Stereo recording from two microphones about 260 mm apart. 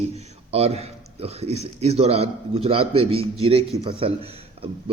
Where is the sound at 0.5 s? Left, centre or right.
Right.